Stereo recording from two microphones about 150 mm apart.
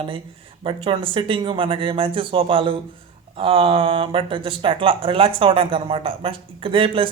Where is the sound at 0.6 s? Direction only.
35° right (ahead or behind).